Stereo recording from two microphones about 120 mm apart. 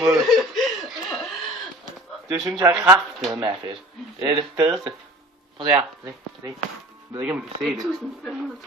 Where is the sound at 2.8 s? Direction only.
10° right (ahead or behind).